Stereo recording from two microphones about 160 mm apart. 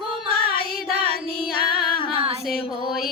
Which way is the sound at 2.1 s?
35° right (ahead or behind).